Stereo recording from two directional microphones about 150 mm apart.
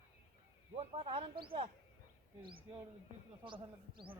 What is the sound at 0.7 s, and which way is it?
Speech, 40° right (ahead or behind).